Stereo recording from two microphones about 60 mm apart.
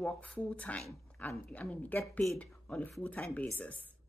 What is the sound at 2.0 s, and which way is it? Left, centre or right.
Speech, left.